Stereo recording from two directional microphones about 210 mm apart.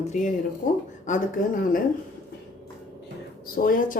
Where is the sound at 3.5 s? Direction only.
40° left (ahead or behind).